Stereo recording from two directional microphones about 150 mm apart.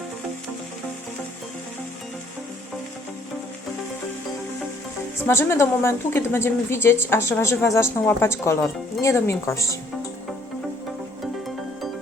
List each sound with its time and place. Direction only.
5.1 s a woman's voice: 15° left (ahead or behind)